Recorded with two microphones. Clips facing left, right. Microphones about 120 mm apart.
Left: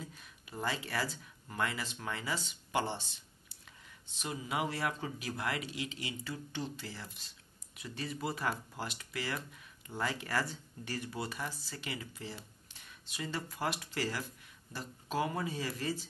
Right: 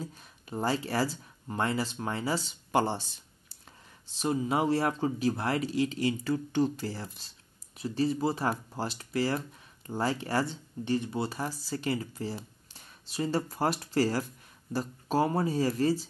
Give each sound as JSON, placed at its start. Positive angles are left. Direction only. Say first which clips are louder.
{"t": 0.0, "sound": "speech", "louder": "right 7 dB", "side_deg": -35}